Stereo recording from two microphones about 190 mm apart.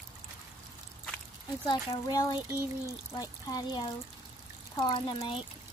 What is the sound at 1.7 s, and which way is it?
Speech, 20° left (ahead or behind).